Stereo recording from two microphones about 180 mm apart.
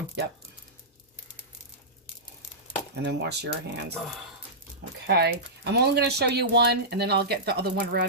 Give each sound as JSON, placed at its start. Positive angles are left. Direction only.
{"t": 2.9, "sound": "speech", "side_deg": -70}
{"t": 5.0, "sound": "speech", "side_deg": -65}